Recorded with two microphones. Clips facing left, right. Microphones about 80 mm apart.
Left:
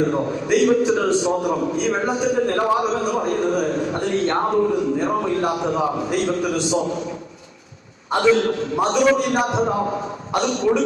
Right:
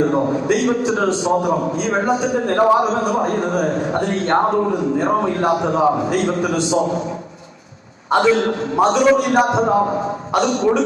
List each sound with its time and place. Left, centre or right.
0.1 s a man's voice: right
8.1 s a man's voice: right